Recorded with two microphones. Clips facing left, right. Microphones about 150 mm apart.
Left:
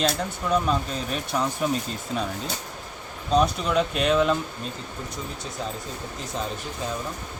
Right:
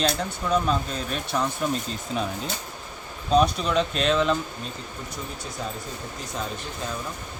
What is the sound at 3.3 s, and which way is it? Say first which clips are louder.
Speech: right 1 dB; 5° left (ahead or behind).